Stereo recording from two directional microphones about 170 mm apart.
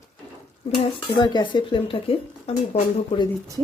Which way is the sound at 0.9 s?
25° left (ahead or behind).